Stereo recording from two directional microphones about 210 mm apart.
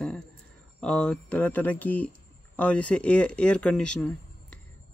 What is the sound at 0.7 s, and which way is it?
Speech, 5° left (ahead or behind).